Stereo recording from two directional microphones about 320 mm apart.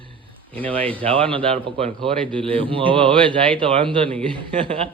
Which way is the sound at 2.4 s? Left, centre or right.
Centre.